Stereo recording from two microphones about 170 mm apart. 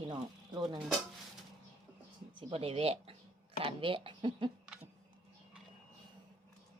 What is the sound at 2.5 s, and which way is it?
Speech, 35° right (ahead or behind).